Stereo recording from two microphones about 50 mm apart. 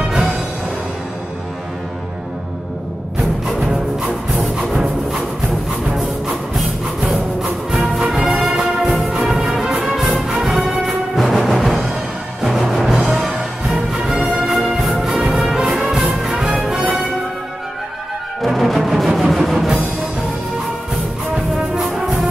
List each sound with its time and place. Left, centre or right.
3.4 s music: centre
7.7 s music: centre
8.5 s music: centre
9.1 s music: centre
18.4 s music: centre
21.7 s music: centre